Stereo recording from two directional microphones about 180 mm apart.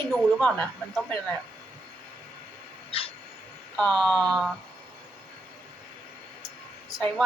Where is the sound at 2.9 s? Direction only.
30° left (ahead or behind).